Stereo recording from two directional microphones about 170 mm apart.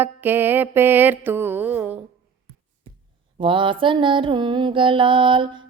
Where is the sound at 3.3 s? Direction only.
30° right (ahead or behind).